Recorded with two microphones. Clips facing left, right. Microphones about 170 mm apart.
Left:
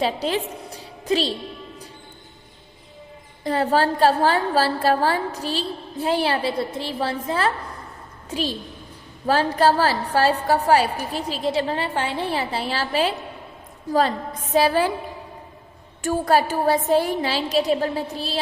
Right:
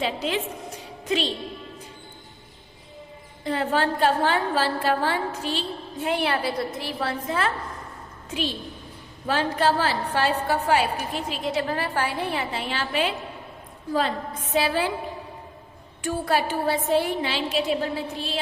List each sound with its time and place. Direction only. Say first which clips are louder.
0.0 s a woman's voice: left 3 dB; 35° left (ahead or behind)
3.4 s a woman's voice: left 4 dB; 40° left (ahead or behind)
14.5 s a woman's voice: left 5 dB; 40° left (ahead or behind)
16.0 s a woman's voice: left 5 dB; 40° left (ahead or behind)